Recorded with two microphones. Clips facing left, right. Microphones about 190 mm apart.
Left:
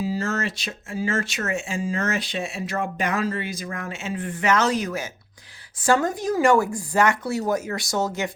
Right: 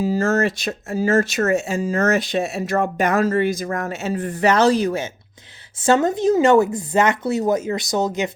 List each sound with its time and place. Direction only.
0.0 s speech: 45° right (ahead or behind); by 8.3 s 20° right (ahead or behind)